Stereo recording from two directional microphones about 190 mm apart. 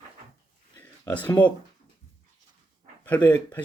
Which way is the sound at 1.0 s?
10° left (ahead or behind).